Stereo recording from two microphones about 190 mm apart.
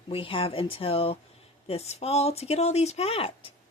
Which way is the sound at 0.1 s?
25° left (ahead or behind).